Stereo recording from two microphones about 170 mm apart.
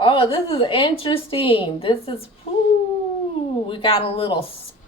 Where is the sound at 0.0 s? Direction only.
30° left (ahead or behind).